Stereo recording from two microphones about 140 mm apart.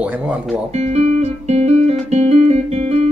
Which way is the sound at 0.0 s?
10° right (ahead or behind).